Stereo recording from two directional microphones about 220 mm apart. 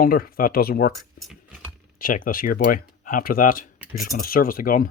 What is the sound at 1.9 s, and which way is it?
Speech, 40° left (ahead or behind).